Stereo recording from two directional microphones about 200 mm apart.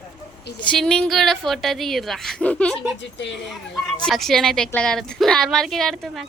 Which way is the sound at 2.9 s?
60° left (ahead or behind).